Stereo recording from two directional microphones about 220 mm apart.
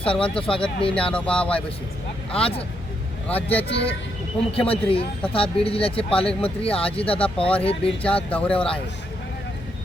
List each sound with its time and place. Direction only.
0.0 s speech: 25° left (ahead or behind)
0.9 s speech: 5° left (ahead or behind)
2.4 s speech: 25° left (ahead or behind)
3.2 s speech: 5° left (ahead or behind)
3.6 s speech: 25° left (ahead or behind)
8.0 s speech: 5° left (ahead or behind)